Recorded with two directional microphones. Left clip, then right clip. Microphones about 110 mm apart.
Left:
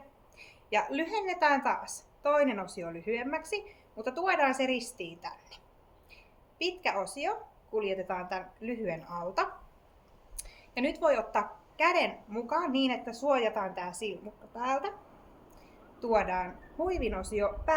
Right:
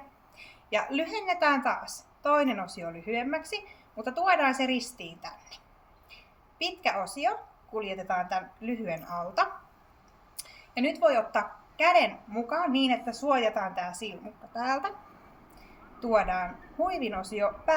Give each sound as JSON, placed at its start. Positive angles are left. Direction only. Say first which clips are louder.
{"t": 0.3, "sound": "a woman's voice", "louder": "even", "side_deg": 35}
{"t": 16.0, "sound": "a woman's voice", "louder": "right 2 dB", "side_deg": 35}